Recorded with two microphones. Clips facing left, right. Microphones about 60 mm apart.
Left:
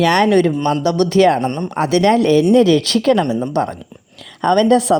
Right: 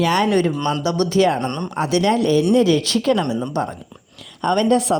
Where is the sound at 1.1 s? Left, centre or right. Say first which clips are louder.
Left 5 dB; left.